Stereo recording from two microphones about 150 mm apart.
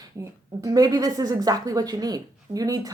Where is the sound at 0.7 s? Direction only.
25° right (ahead or behind).